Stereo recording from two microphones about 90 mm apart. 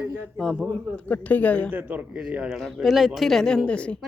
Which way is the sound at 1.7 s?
20° right (ahead or behind).